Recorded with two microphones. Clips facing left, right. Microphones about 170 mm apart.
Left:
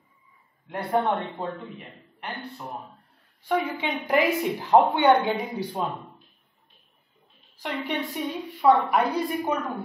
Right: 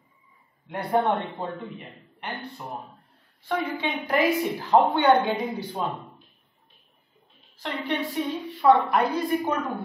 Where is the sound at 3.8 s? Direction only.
15° left (ahead or behind).